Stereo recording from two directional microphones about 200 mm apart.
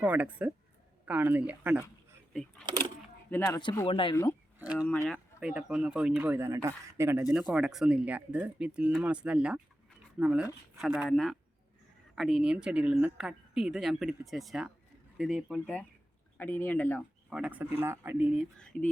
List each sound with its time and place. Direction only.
0.0 s speech: 5° right (ahead or behind); by 3.6 s 10° left (ahead or behind)
3.6 s speech: 25° left (ahead or behind)
4.1 s speech: 15° left (ahead or behind)
4.6 s speech: 5° right (ahead or behind); by 17.0 s 10° left (ahead or behind)
17.2 s speech: 5° right (ahead or behind)